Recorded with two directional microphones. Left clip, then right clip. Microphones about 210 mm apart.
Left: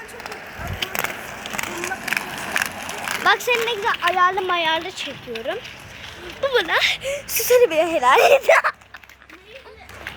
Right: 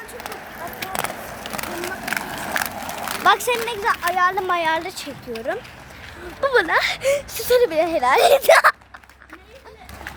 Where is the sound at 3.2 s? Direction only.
5° right (ahead or behind).